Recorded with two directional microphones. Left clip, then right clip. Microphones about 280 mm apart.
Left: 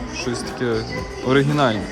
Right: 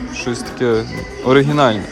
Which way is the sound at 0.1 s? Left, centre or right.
Centre.